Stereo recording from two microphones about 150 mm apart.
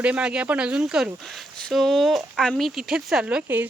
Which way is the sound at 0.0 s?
5° right (ahead or behind).